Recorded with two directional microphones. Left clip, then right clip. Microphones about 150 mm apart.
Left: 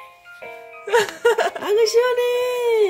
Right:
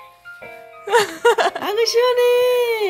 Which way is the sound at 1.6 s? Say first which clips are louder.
Left 2 dB; 25° right (ahead or behind).